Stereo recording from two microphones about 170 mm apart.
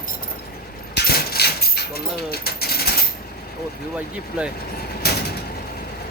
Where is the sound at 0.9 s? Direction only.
65° left (ahead or behind).